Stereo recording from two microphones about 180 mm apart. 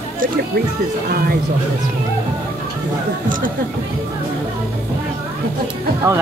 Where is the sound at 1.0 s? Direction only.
55° right (ahead or behind).